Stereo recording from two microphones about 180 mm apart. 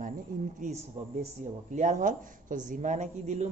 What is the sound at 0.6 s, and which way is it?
Speech, 40° right (ahead or behind).